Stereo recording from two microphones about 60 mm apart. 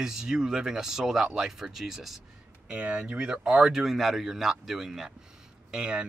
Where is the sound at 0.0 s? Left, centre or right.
Centre.